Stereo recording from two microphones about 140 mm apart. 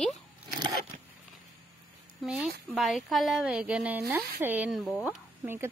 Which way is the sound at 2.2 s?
5° right (ahead or behind).